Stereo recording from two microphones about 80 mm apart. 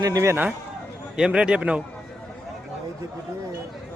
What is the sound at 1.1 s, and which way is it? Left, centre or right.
Speech, centre.